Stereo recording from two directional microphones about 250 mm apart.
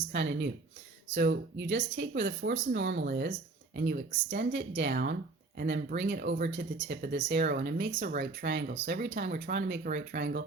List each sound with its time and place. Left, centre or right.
0.1 s speech: right